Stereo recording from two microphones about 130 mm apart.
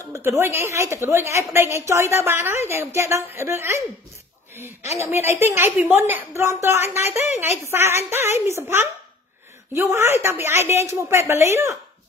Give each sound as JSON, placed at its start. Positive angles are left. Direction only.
{"t": 0.4, "sound": "a woman's voice", "side_deg": -20}
{"t": 5.0, "sound": "a woman's voice", "side_deg": -20}